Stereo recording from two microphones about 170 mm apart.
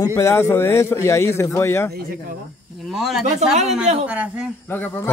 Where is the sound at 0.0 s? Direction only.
15° left (ahead or behind).